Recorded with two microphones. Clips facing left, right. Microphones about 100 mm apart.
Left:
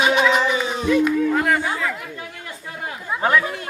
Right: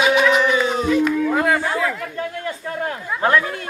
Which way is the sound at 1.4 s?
5° right (ahead or behind).